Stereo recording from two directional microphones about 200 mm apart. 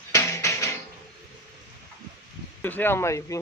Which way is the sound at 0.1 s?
15° left (ahead or behind).